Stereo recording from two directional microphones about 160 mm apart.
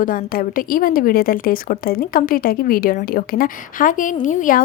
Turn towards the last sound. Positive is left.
turn(degrees=55)  # may be behind; listen again after turning